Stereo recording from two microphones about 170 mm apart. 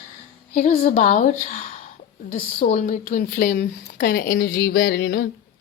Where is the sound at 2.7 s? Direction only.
45° left (ahead or behind); by 5.2 s 90° left.